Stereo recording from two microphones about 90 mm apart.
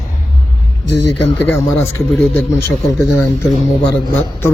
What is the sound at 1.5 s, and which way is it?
A man's voice, 30° left (ahead or behind).